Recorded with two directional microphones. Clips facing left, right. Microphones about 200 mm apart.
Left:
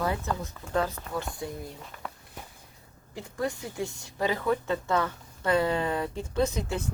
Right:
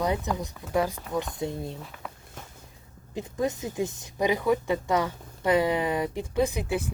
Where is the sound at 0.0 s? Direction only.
15° right (ahead or behind).